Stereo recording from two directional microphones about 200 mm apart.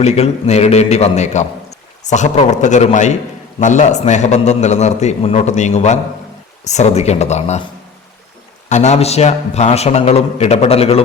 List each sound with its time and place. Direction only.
0.0 s a man's voice: 30° left (ahead or behind)
8.7 s a man's voice: 35° left (ahead or behind)